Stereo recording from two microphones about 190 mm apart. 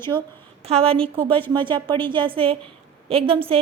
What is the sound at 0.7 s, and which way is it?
A woman's voice, 30° right (ahead or behind).